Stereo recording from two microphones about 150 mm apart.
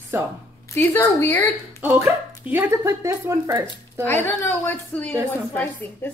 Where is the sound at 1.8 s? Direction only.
10° right (ahead or behind).